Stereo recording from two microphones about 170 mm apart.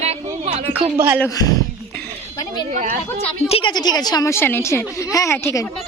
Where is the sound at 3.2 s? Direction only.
35° left (ahead or behind); by 5.6 s 15° left (ahead or behind).